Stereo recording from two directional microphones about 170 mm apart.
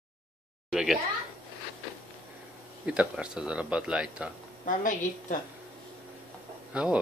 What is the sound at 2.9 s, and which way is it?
Speech, 5° right (ahead or behind).